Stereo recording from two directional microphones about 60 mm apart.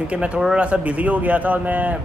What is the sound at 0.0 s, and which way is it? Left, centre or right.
A man's voice, right.